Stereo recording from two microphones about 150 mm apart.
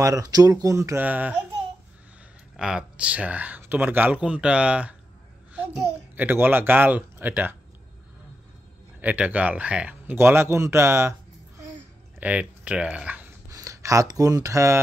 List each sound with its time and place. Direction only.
0.0 s speech: 25° right (ahead or behind)
2.5 s speech: 5° right (ahead or behind)
6.1 s speech: 15° right (ahead or behind)
9.0 s speech: 10° right (ahead or behind)
13.5 s speech: 20° right (ahead or behind)